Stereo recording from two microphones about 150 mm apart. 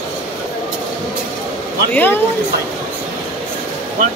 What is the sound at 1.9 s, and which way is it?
Speech, 10° left (ahead or behind).